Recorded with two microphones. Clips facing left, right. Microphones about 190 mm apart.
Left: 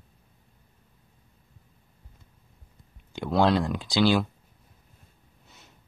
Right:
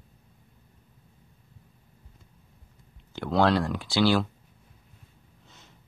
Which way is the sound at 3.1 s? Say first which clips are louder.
Even; 15° left (ahead or behind).